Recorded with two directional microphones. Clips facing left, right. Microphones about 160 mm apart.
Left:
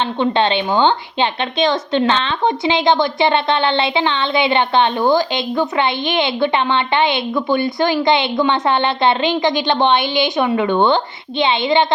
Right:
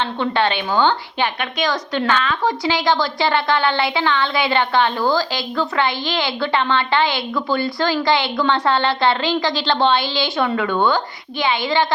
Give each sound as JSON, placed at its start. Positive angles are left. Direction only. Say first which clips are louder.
{"t": 0.2, "sound": "speech", "louder": "left 4 dB", "side_deg": 20}